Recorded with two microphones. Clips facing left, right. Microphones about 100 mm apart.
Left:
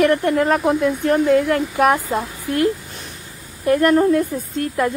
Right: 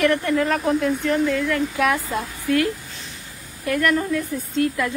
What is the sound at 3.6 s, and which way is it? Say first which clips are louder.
Speech: left 6 dB; 35° left (ahead or behind).